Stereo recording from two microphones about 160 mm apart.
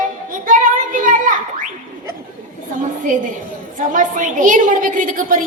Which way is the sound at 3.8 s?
55° right (ahead or behind).